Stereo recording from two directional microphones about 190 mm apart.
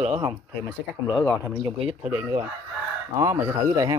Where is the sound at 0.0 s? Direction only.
30° right (ahead or behind).